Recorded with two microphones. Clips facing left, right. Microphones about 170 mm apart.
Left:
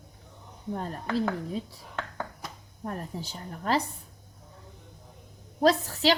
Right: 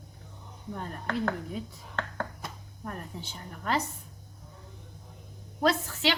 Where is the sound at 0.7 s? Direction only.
35° left (ahead or behind).